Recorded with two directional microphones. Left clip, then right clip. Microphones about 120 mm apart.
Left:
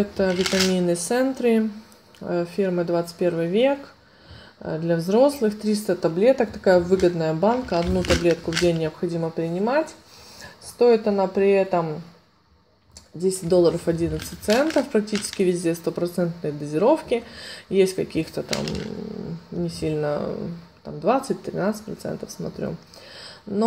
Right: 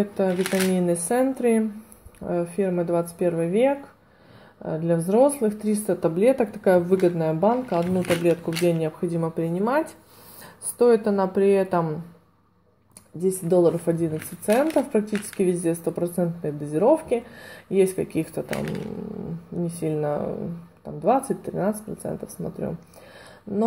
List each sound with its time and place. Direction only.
0.0 s speech: 5° left (ahead or behind)
4.6 s speech: 5° left (ahead or behind)
9.0 s speech: 10° right (ahead or behind)
10.8 s speech: 90° right
13.2 s speech: centre (ahead or behind)
23.1 s a sound: 5° left (ahead or behind)